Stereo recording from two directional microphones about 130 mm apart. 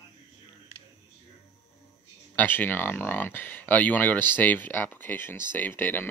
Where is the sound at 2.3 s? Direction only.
15° left (ahead or behind).